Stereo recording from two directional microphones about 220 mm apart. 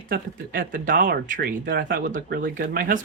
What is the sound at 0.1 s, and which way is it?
Speech, 40° right (ahead or behind).